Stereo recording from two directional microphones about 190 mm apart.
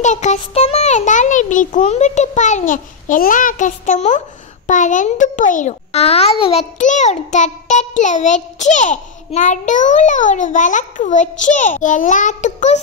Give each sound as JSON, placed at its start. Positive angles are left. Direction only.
{"t": 0.0, "sound": "a child's voice", "side_deg": 40}